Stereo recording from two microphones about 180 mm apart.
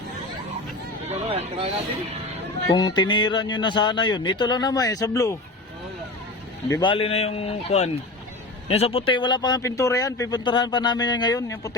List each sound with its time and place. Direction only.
1.0 s a sound: 35° right (ahead or behind)
2.6 s speech: 25° left (ahead or behind)
6.7 s speech: 25° left (ahead or behind)